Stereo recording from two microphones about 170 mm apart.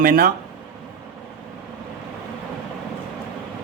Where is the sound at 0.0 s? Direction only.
55° right (ahead or behind).